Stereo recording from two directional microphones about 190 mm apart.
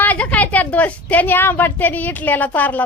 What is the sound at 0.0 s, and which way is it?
Speech, 10° left (ahead or behind).